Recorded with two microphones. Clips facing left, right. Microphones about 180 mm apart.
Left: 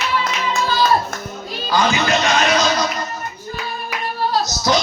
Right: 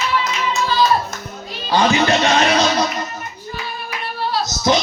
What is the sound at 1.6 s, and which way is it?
Music, 30° right (ahead or behind).